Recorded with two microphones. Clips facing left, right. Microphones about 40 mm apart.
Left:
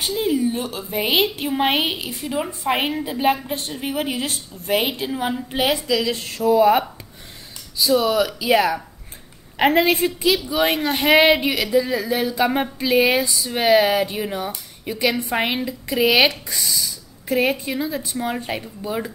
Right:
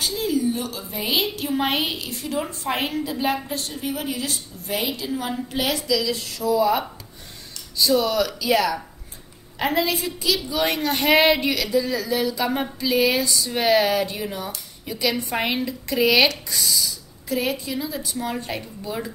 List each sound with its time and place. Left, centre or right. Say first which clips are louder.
0.0 s a woman's voice: left 2 dB; left
7.7 s speech: left 2 dB; centre
9.6 s a woman's voice: left 6 dB; left
10.3 s a woman's voice: left 3 dB; left
13.3 s speech: left 3 dB; centre
15.3 s speech: left 2 dB; centre
17.3 s a woman's voice: left 5 dB; left